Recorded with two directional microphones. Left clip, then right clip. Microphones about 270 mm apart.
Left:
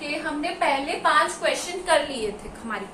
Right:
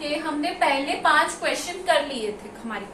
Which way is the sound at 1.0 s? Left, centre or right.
Centre.